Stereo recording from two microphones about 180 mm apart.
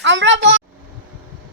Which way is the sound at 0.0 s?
90° right.